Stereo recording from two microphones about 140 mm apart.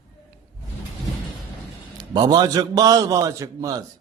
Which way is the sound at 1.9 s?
30° right (ahead or behind).